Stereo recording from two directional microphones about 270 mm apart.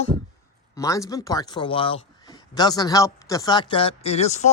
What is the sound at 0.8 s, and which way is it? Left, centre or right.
A man's voice, centre.